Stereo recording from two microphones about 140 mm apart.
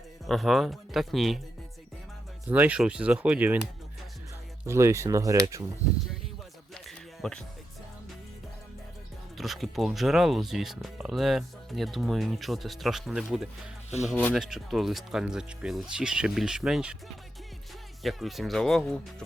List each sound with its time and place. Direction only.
0.3 s speech: centre (ahead or behind)
2.5 s speech: 10° right (ahead or behind)
4.6 s speech: 20° right (ahead or behind)
6.8 s a sound: 5° left (ahead or behind)
9.4 s speech: centre (ahead or behind)
18.0 s speech: centre (ahead or behind)